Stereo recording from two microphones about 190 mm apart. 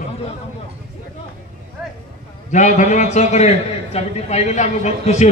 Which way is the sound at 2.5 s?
40° left (ahead or behind).